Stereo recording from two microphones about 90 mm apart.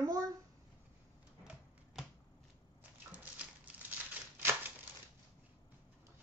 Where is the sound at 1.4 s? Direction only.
5° right (ahead or behind).